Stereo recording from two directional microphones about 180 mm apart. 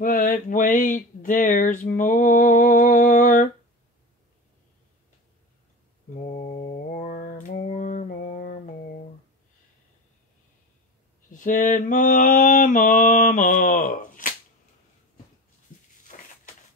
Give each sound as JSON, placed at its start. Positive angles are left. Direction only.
{"t": 0.0, "sound": "speech", "side_deg": 50}
{"t": 6.1, "sound": "mantra", "side_deg": 35}
{"t": 11.3, "sound": "mantra", "side_deg": 45}